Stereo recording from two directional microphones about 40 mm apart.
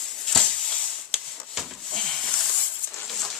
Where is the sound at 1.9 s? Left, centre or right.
Centre.